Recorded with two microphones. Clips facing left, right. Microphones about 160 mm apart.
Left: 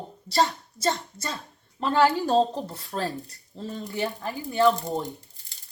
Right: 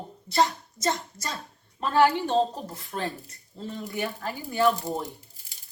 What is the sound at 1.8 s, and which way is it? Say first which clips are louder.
Speech: even; 35° left (ahead or behind).